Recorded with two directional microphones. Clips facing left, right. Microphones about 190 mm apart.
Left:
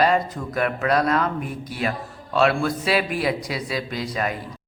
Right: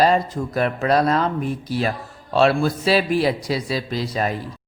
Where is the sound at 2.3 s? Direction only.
30° right (ahead or behind).